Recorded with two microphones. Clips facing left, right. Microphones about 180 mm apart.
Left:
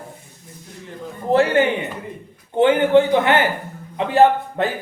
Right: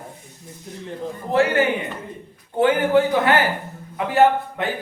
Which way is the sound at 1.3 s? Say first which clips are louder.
Left 3 dB; 30° left (ahead or behind).